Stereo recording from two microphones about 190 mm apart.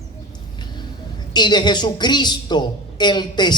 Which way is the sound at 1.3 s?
20° left (ahead or behind).